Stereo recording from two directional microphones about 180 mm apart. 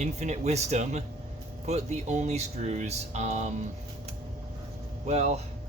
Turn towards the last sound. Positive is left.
turn(degrees=-35)  # may be behind; listen again after turning